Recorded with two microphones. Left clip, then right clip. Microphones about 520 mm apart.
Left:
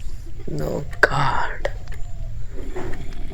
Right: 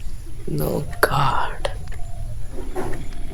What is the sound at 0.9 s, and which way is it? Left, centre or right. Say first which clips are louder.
Whispering: left 1 dB; right.